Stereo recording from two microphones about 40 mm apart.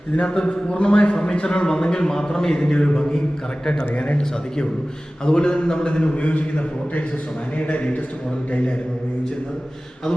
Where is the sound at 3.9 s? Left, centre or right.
Left.